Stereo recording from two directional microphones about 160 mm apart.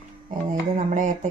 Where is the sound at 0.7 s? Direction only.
50° right (ahead or behind).